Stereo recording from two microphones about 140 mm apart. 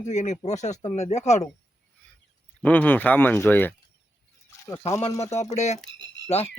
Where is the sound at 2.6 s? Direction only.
10° left (ahead or behind).